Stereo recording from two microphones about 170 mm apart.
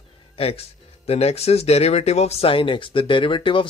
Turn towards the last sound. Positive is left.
turn(degrees=30)  # may be behind; listen again after turning